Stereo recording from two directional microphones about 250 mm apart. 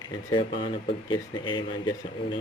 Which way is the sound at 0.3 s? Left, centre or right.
Centre.